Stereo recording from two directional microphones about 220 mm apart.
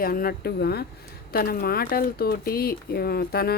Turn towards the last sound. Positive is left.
turn(degrees=45)  # may be behind; listen again after turning